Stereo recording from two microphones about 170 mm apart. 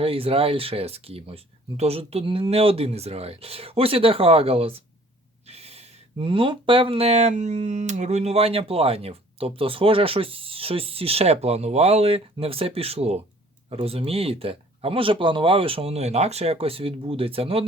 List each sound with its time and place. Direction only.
0.0 s speech: 35° right (ahead or behind)